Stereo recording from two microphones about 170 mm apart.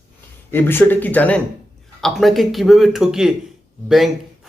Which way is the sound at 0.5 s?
10° left (ahead or behind).